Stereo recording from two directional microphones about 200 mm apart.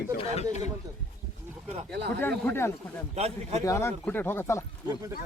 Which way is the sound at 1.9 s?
55° right (ahead or behind).